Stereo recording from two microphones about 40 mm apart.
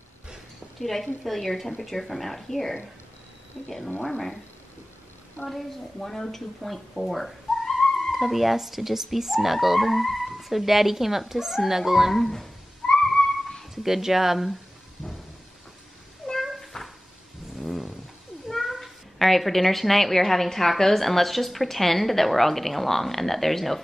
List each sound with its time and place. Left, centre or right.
0.7 s a woman's voice: centre
5.5 s a woman's voice: centre
8.1 s speech: centre
13.1 s a sound: centre
13.8 s speech: centre
16.2 s cat: centre
16.7 s a sound: centre
18.5 s speech: centre